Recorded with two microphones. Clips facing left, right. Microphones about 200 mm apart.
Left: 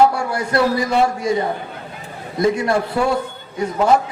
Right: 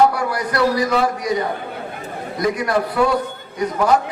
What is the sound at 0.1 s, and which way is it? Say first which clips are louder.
A man's voice: left 1 dB; 25° left (ahead or behind).